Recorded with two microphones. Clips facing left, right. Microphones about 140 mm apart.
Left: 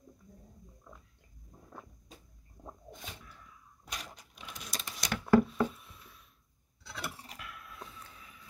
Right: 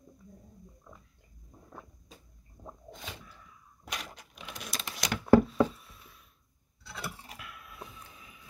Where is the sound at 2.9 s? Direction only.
90° right.